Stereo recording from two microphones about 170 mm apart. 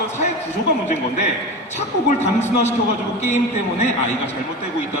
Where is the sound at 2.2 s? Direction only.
40° left (ahead or behind).